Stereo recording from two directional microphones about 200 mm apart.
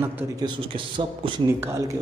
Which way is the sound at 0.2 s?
20° right (ahead or behind).